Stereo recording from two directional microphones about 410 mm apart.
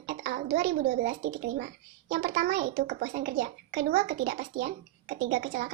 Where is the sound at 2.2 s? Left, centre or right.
Right.